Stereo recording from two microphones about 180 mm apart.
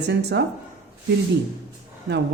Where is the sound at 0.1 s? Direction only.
70° right (ahead or behind).